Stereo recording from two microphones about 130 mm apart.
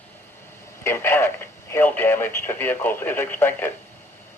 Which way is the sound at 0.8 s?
20° left (ahead or behind).